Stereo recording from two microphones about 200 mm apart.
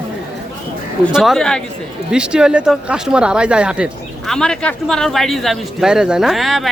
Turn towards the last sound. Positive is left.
turn(degrees=0)  # may be behind; listen again after turning